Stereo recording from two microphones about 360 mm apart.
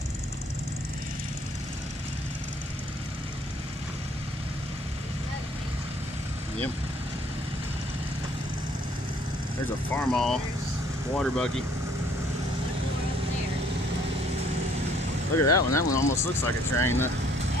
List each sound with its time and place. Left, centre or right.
9.8 s speech: centre
15.3 s speech: left
16.4 s speech: centre